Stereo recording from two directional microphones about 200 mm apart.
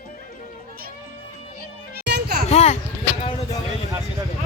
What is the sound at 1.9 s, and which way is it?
Music, 55° right (ahead or behind).